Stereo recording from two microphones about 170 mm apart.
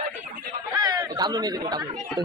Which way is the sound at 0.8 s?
25° right (ahead or behind).